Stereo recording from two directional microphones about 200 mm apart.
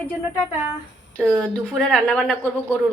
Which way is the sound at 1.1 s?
5° left (ahead or behind).